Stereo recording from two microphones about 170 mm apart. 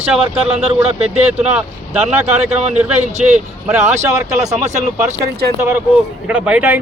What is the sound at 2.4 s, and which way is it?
Speech, 40° right (ahead or behind).